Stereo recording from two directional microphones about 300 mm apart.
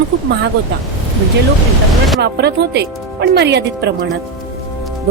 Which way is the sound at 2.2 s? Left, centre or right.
Right.